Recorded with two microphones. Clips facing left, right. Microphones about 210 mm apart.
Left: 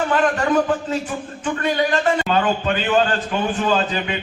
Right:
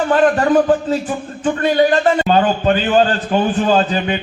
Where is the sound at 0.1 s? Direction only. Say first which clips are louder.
Right 8 dB; 35° right (ahead or behind).